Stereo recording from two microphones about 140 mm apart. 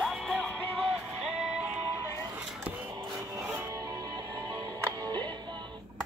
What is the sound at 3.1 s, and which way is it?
Music, 20° right (ahead or behind).